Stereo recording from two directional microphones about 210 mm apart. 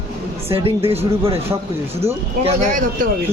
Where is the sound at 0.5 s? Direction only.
25° right (ahead or behind).